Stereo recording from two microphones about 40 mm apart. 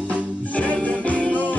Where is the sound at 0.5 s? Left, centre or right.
Left.